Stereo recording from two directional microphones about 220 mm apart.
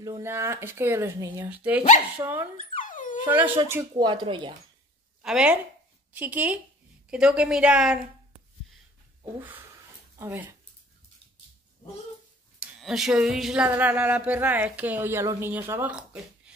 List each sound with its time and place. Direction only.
0.0 s speech: 15° right (ahead or behind)
2.7 s dog: 35° left (ahead or behind)
3.6 s speech: 15° right (ahead or behind)
5.2 s a woman's voice: 5° right (ahead or behind)
10.1 s speech: 10° right (ahead or behind)
12.5 s speech: centre (ahead or behind)
16.5 s a sound: 5° right (ahead or behind)